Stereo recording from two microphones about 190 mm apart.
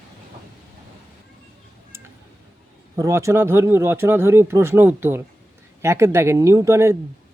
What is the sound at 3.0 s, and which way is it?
Speech, 15° right (ahead or behind).